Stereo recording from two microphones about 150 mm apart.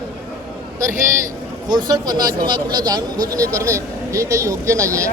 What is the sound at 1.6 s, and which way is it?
A man's voice, 30° right (ahead or behind).